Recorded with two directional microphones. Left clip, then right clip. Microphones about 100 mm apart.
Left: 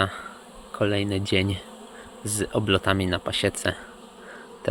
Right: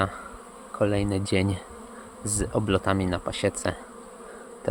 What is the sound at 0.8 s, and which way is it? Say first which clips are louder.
Speech: even; 25° right (ahead or behind).